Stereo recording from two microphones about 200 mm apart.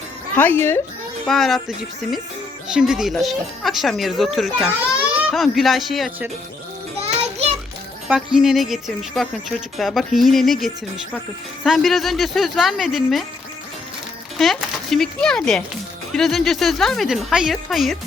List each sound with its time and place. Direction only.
0.3 s speech: 10° left (ahead or behind)
1.3 s a woman's voice: centre (ahead or behind)
7.0 s music: 30° right (ahead or behind)
8.0 s a woman's voice: 5° right (ahead or behind)
14.3 s a woman's voice: centre (ahead or behind)